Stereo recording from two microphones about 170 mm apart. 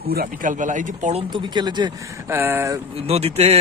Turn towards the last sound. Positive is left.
turn(degrees=-35)  # may be behind; listen again after turning